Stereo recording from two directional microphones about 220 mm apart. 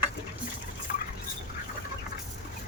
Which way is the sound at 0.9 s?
40° left (ahead or behind).